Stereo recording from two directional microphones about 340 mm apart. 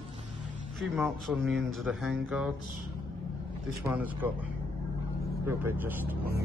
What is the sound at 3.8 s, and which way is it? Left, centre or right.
Speech, centre.